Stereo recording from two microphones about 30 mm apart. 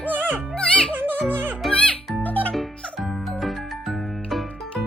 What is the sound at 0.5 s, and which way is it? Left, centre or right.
Music, left.